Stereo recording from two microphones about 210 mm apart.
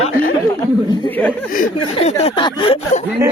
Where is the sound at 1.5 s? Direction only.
35° left (ahead or behind).